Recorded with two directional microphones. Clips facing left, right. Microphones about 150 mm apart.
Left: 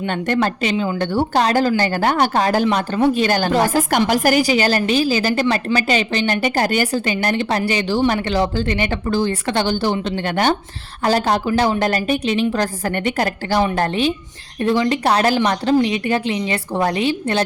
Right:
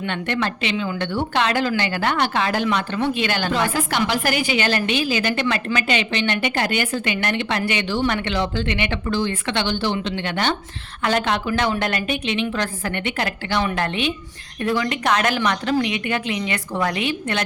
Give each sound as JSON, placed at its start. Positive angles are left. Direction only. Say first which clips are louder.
{"t": 0.0, "sound": "a woman's voice", "louder": "left 5 dB", "side_deg": 40}
{"t": 11.0, "sound": "a woman's voice", "louder": "left 4 dB", "side_deg": 35}